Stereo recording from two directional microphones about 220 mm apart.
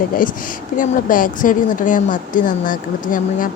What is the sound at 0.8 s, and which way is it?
Speech, 40° left (ahead or behind).